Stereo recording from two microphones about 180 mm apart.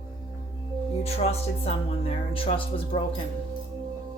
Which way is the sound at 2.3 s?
30° left (ahead or behind).